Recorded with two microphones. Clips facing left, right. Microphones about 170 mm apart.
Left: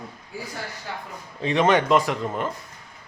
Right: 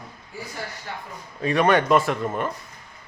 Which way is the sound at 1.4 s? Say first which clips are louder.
Even; 20° left (ahead or behind).